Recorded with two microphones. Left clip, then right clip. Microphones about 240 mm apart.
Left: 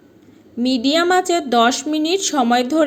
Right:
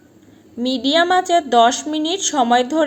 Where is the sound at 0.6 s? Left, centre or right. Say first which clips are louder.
Even; left.